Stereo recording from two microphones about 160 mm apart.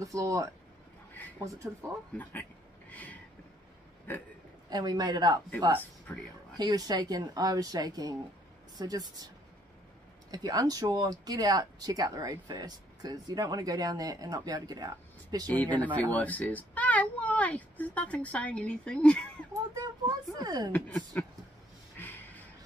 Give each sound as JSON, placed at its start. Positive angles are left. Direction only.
{"t": 0.0, "sound": "speech", "side_deg": -20}
{"t": 2.9, "sound": "a sound", "side_deg": 10}
{"t": 4.6, "sound": "speech", "side_deg": -25}
{"t": 6.5, "sound": "speech", "side_deg": -25}
{"t": 10.3, "sound": "speech", "side_deg": -25}
{"t": 15.4, "sound": "a child's voice", "side_deg": 10}
{"t": 19.7, "sound": "a sound", "side_deg": -25}
{"t": 20.7, "sound": "a child's voice", "side_deg": 10}
{"t": 22.0, "sound": "snort", "side_deg": 15}